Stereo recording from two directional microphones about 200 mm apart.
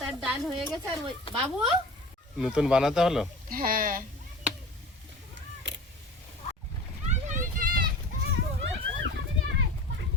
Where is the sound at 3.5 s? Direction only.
45° right (ahead or behind).